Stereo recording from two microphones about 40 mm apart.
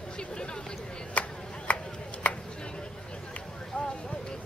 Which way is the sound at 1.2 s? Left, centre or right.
Left.